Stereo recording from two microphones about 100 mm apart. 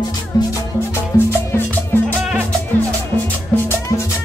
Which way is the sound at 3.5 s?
10° left (ahead or behind).